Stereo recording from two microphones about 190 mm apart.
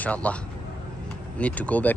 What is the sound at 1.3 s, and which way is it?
Speech, 5° left (ahead or behind).